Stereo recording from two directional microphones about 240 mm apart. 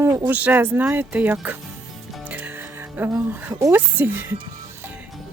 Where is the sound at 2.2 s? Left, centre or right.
Centre.